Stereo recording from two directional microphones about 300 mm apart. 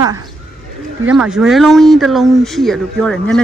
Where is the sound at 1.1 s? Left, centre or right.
Centre.